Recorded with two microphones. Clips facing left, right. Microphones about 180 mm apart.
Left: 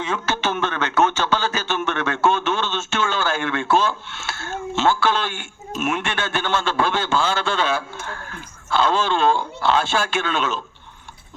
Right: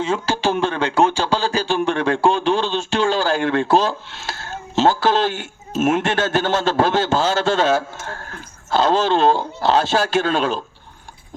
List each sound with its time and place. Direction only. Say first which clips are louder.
0.0 s a man's voice: right 4 dB; 30° right (ahead or behind)